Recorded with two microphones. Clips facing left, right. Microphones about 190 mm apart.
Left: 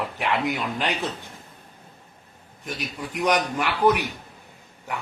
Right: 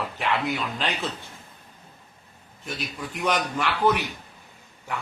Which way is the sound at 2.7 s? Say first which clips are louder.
Left 1 dB; 15° left (ahead or behind).